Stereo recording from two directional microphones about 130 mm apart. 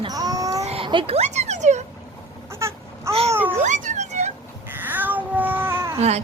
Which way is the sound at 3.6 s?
70° right (ahead or behind).